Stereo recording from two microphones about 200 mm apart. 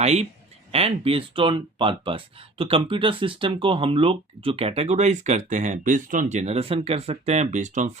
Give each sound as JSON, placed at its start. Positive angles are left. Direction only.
{"t": 0.0, "sound": "speech", "side_deg": -35}